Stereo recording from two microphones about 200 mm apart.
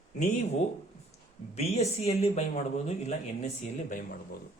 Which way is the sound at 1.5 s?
30° left (ahead or behind).